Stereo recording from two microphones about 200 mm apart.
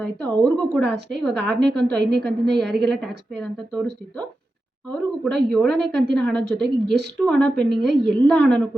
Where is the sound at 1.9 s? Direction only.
55° right (ahead or behind).